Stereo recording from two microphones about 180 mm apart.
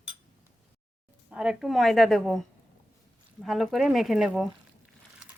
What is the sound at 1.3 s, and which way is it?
A woman's voice, 5° right (ahead or behind).